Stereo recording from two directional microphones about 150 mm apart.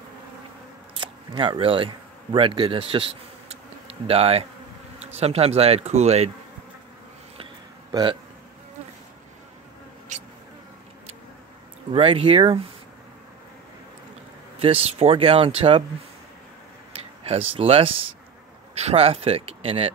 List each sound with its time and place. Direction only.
0.9 s speech: 35° right (ahead or behind)
7.9 s speech: 30° right (ahead or behind)
11.9 s speech: 40° right (ahead or behind)
14.6 s speech: 40° right (ahead or behind)
16.9 s speech: 40° right (ahead or behind)